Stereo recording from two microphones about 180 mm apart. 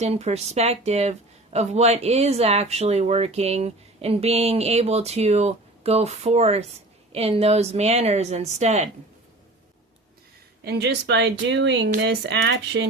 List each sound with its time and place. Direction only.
0.0 s speech: 40° right (ahead or behind)
10.6 s speech: 65° right (ahead or behind); by 11.9 s 80° right
11.9 s speech: 70° right (ahead or behind)